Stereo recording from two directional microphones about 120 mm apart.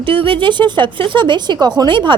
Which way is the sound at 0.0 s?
45° right (ahead or behind).